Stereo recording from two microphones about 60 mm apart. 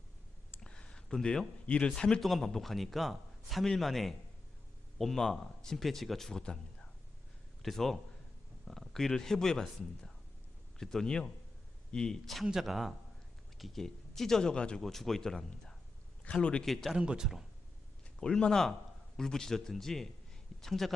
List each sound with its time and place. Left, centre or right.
0.6 s speech: centre
2.2 s a man's voice: centre
6.4 s speech: centre
7.6 s a man's voice: centre
12.5 s a man's voice: centre
14.8 s speech: centre
16.2 s a man's voice: centre
16.6 s a man's voice: centre
17.0 s a man's voice: centre
18.2 s a man's voice: centre